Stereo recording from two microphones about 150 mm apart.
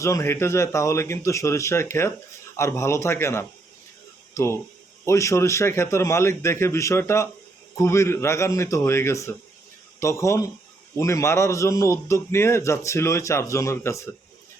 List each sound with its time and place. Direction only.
0.0 s a man's voice: 20° left (ahead or behind)